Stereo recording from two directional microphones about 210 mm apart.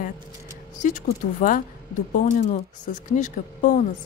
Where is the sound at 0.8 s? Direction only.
35° left (ahead or behind).